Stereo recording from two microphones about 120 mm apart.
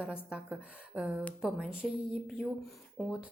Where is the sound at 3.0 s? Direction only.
10° left (ahead or behind).